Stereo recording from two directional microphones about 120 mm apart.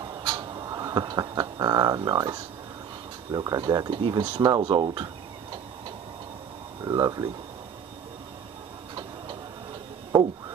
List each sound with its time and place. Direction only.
0.0 s a sound: 30° right (ahead or behind)
3.3 s speech: 30° right (ahead or behind)
4.2 s tick-tock: 35° right (ahead or behind)
6.8 s speech: 30° right (ahead or behind)